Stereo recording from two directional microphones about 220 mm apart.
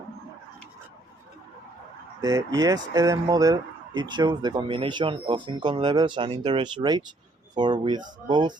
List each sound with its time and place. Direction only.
2.2 s speech: 15° right (ahead or behind)